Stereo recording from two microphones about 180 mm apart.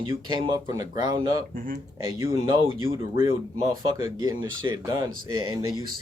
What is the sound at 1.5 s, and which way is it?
Speech, 50° right (ahead or behind).